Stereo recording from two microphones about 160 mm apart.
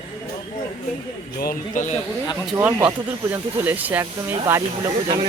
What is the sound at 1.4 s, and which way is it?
Speech, 60° left (ahead or behind).